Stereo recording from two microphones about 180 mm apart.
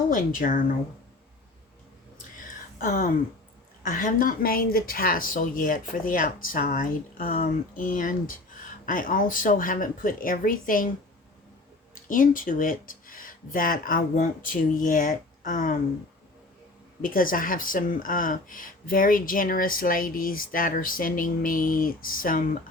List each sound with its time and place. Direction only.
0.1 s speech: 50° left (ahead or behind)
2.7 s a sound: 45° left (ahead or behind)
3.8 s speech: 50° left (ahead or behind)
12.0 s speech: 50° left (ahead or behind)
17.0 s speech: 50° left (ahead or behind)